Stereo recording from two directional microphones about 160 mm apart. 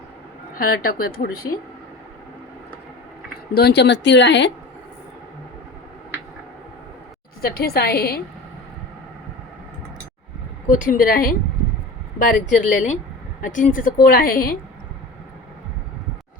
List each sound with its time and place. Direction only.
0.5 s a woman's voice: 65° left (ahead or behind)
3.5 s speech: 85° left
7.4 s a woman's voice: 75° left (ahead or behind)
10.7 s a woman's voice: 55° left (ahead or behind)